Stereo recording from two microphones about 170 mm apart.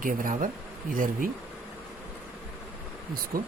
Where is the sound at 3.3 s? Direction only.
60° right (ahead or behind).